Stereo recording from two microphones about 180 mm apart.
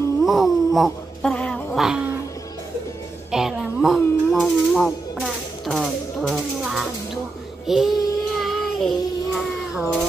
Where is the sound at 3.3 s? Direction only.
Centre (ahead or behind).